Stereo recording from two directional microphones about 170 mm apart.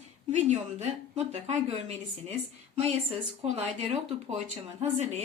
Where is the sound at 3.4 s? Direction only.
35° right (ahead or behind).